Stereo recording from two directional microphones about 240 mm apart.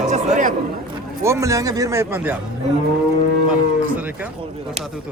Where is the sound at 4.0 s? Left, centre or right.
Centre.